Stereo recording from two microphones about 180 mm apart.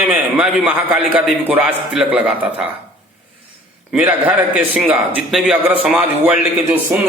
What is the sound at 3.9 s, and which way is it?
A man's voice, 5° right (ahead or behind).